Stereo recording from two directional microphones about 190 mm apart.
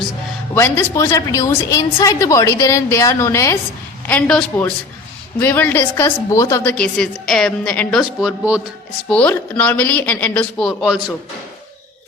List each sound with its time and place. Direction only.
0.5 s a woman's voice: 15° left (ahead or behind); by 8.6 s 5° right (ahead or behind)
9.0 s a woman's voice: 5° left (ahead or behind)